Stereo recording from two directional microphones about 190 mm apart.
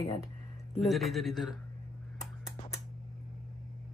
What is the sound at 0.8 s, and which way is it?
Speech, centre (ahead or behind).